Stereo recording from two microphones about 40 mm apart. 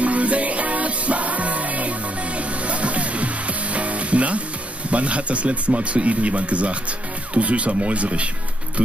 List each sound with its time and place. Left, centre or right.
0.0 s music: right
4.9 s speech: right